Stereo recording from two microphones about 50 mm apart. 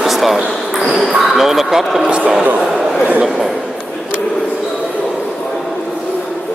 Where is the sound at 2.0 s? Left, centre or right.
Right.